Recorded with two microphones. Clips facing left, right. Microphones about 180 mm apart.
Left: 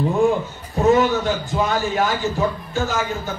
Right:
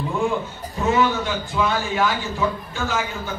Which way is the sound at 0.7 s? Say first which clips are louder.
Left 4 dB; 40° left (ahead or behind).